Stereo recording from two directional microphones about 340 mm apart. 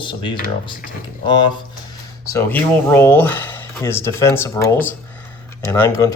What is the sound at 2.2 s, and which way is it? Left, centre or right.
Speech, centre.